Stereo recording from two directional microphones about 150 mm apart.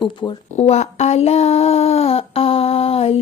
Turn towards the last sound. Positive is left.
turn(degrees=40)  # may be behind; listen again after turning